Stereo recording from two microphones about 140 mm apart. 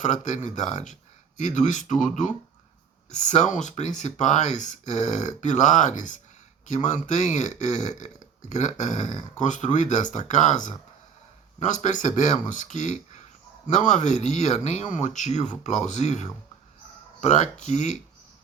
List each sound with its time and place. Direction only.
0.0 s speech: 60° left (ahead or behind)